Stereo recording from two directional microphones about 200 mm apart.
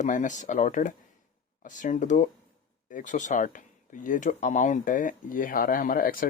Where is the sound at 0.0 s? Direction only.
40° left (ahead or behind).